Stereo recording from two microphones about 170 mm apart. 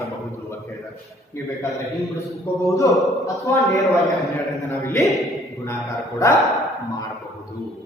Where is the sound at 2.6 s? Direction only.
20° left (ahead or behind).